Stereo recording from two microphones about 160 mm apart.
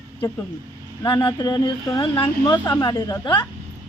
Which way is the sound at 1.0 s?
25° left (ahead or behind).